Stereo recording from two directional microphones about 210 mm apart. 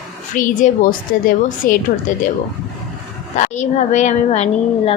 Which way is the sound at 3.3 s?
35° left (ahead or behind).